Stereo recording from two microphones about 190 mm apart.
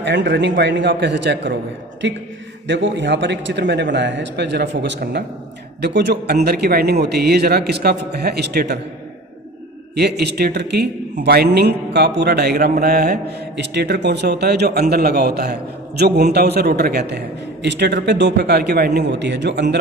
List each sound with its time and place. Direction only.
0.0 s a man's voice: 70° right (ahead or behind)
9.9 s a man's voice: 60° right (ahead or behind)